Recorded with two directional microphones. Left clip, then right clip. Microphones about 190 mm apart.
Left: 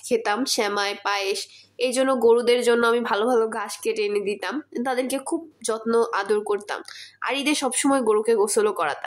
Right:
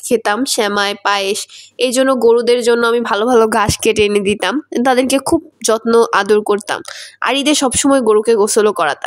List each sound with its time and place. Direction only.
0.1 s speech: 40° right (ahead or behind)
3.3 s a woman's voice: 55° right (ahead or behind); by 8.9 s 40° right (ahead or behind)